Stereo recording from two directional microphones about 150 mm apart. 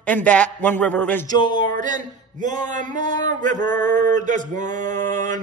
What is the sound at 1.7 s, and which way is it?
Mantra, 60° right (ahead or behind).